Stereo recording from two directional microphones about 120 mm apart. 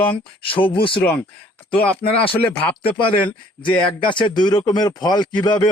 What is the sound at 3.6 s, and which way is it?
Speech, 45° left (ahead or behind).